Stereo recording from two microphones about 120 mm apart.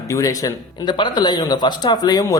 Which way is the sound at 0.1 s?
25° left (ahead or behind).